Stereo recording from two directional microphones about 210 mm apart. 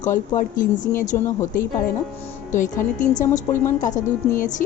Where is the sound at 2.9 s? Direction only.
35° left (ahead or behind).